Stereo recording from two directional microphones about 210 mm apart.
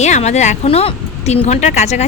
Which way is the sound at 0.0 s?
35° left (ahead or behind).